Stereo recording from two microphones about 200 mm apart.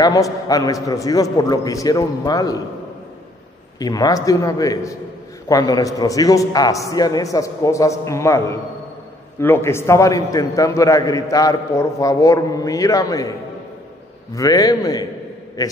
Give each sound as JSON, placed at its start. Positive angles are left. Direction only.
{"t": 0.0, "sound": "a man's voice", "side_deg": 20}
{"t": 3.8, "sound": "a man's voice", "side_deg": 20}
{"t": 14.3, "sound": "a man's voice", "side_deg": 15}